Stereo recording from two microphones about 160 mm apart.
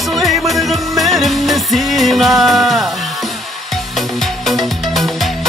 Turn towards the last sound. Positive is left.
turn(degrees=0)  # may be behind; listen again after turning